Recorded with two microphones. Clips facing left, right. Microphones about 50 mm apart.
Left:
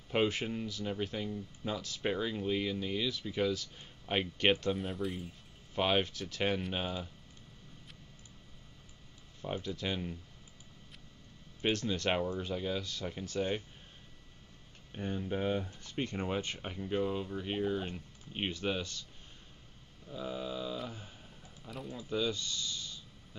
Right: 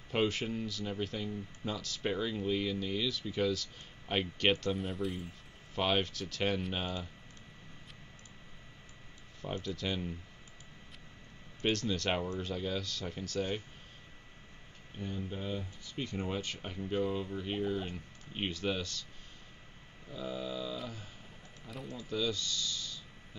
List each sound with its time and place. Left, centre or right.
0.1 s speech: centre
2.0 s speech: centre
4.7 s speech: centre
9.6 s speech: centre
11.6 s speech: centre
15.0 s speech: left
16.9 s speech: centre
18.5 s speech: left
20.1 s speech: centre
21.9 s speech: left